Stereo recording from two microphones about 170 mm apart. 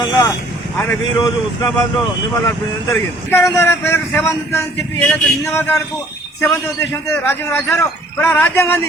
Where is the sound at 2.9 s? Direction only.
10° left (ahead or behind).